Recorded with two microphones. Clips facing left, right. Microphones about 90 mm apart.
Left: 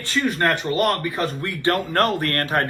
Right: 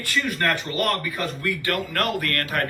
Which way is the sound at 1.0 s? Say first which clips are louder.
Left 4 dB; 30° left (ahead or behind).